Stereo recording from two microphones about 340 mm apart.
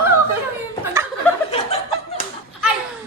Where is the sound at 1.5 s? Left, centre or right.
Centre.